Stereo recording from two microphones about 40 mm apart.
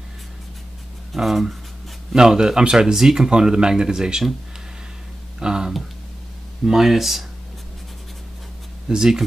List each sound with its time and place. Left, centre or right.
1.1 s speech: centre
2.1 s speech: centre
5.4 s a sound: centre
6.6 s speech: centre
8.8 s speech: centre